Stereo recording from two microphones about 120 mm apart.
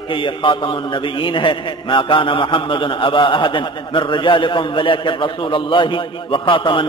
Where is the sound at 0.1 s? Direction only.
45° left (ahead or behind).